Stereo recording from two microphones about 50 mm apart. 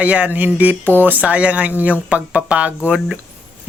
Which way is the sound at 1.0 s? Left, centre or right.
Right.